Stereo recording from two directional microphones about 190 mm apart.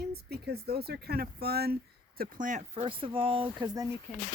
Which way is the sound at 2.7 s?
30° right (ahead or behind).